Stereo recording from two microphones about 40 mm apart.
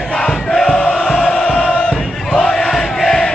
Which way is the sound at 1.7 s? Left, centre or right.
Left.